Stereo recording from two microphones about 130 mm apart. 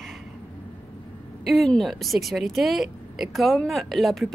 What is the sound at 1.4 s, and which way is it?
Speech, centre (ahead or behind).